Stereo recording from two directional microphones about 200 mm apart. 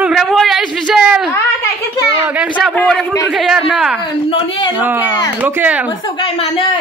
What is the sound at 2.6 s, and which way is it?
A man's voice, 5° left (ahead or behind).